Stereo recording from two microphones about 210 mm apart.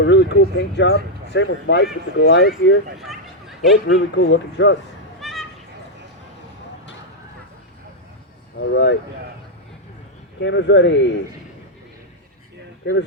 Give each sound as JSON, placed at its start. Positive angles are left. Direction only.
{"t": 0.0, "sound": "speech", "side_deg": 55}
{"t": 3.8, "sound": "speech", "side_deg": 55}
{"t": 5.2, "sound": "a sound", "side_deg": 0}
{"t": 8.7, "sound": "speech", "side_deg": 55}
{"t": 10.4, "sound": "speech", "side_deg": 60}
{"t": 12.8, "sound": "speech", "side_deg": 55}